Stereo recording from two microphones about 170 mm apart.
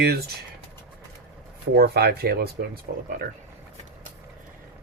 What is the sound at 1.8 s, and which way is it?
Speech, 70° right (ahead or behind).